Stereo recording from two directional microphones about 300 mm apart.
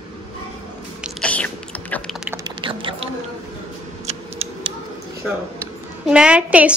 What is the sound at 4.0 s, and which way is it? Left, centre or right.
Scissors, centre.